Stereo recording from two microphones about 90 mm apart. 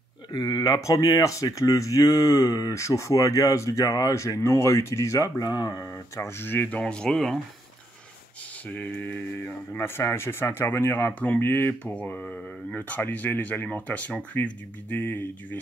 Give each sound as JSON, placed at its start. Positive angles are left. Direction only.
{"t": 0.3, "sound": "speech", "side_deg": 50}
{"t": 5.8, "sound": "speech", "side_deg": 30}
{"t": 6.8, "sound": "speech", "side_deg": 10}
{"t": 8.6, "sound": "speech", "side_deg": 20}